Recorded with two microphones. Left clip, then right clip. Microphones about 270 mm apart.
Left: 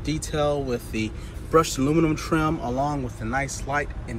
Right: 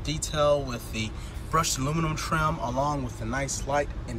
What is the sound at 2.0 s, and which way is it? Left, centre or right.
Speech, centre.